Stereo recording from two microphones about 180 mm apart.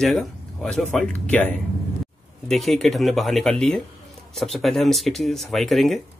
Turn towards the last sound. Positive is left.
turn(degrees=0)  # may be behind; listen again after turning